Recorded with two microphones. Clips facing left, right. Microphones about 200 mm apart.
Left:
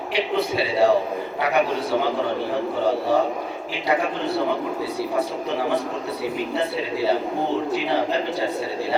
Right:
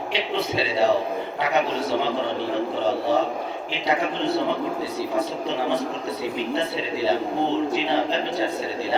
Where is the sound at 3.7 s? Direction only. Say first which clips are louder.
Left 2 dB; 25° right (ahead or behind).